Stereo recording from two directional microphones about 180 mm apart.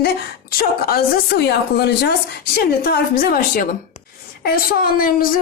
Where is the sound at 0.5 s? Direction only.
55° left (ahead or behind).